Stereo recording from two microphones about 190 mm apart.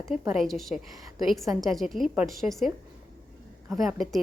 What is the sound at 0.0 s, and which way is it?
A woman's voice, centre (ahead or behind).